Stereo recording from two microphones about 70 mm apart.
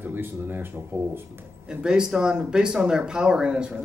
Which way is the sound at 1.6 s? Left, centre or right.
Centre.